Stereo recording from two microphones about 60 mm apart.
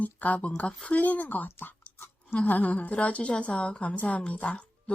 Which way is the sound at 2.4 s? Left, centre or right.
Left.